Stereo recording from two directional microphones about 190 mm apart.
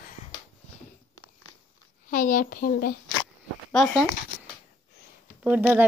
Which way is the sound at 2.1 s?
45° left (ahead or behind).